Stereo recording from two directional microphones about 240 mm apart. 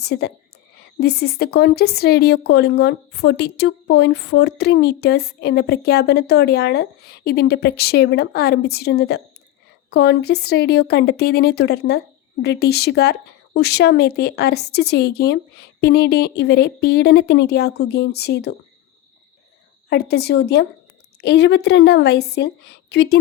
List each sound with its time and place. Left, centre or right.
0.0 s speech: left
19.9 s speech: left